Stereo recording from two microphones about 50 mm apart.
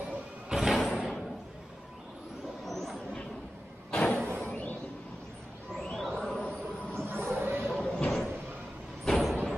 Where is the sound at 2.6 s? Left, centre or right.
Centre.